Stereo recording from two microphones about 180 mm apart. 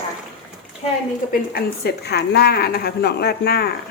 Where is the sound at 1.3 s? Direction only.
60° left (ahead or behind).